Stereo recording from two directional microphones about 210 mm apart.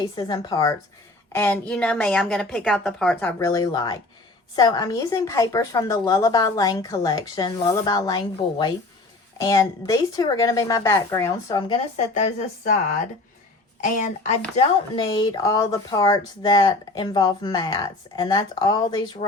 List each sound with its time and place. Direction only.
0.0 s a woman's voice: 20° left (ahead or behind)
11.9 s speech: 35° left (ahead or behind)
13.8 s speech: 35° left (ahead or behind)